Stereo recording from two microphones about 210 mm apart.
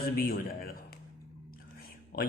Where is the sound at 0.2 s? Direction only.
45° left (ahead or behind).